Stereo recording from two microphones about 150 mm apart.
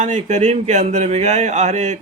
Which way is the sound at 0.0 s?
50° right (ahead or behind).